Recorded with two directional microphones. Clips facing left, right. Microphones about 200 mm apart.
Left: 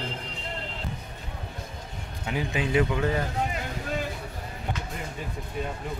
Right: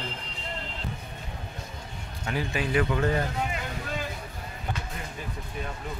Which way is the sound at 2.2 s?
15° left (ahead or behind).